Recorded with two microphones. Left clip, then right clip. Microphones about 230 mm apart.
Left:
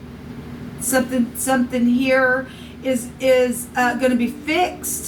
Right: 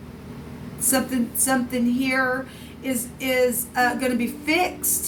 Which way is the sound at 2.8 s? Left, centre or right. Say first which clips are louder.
Left 8 dB; right.